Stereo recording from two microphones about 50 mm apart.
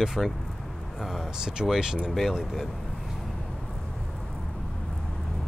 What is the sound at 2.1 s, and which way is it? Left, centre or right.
Speech, centre.